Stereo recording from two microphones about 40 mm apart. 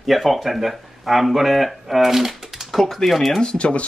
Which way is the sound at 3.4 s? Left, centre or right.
Left.